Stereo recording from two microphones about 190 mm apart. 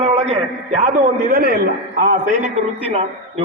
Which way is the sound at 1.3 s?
55° right (ahead or behind).